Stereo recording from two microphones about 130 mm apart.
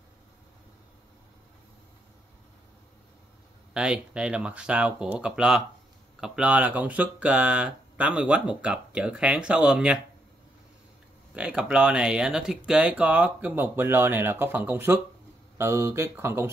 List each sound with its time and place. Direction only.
3.7 s speech: 10° right (ahead or behind)
11.3 s speech: 5° right (ahead or behind)